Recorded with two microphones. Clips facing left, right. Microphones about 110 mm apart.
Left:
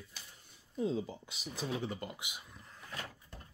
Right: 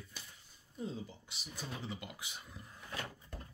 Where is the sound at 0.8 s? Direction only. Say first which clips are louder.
Left 8 dB; 90° left.